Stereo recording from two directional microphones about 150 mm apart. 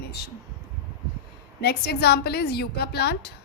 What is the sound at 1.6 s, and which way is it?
A woman's voice, 90° left.